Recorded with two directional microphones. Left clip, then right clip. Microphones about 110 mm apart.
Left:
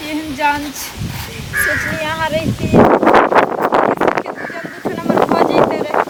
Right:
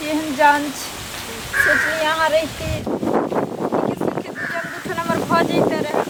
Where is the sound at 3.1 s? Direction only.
35° left (ahead or behind).